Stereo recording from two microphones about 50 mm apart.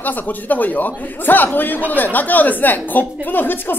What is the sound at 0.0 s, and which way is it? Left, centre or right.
Speech, left.